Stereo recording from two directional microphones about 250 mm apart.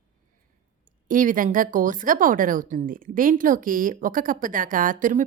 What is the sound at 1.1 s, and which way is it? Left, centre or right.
A woman's voice, right.